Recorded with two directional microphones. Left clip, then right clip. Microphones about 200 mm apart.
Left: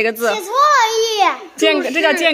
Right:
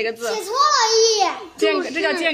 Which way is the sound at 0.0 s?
50° left (ahead or behind).